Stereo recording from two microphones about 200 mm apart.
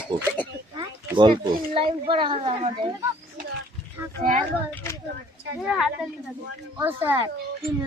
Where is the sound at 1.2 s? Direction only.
25° right (ahead or behind).